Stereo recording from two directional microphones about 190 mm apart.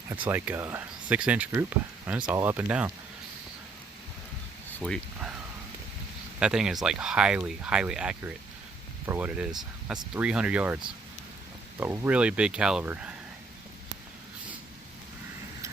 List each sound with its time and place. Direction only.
0.1 s speech: 10° right (ahead or behind)
4.8 s speech: 5° left (ahead or behind)
6.4 s speech: 5° right (ahead or behind)
11.8 s speech: 10° right (ahead or behind)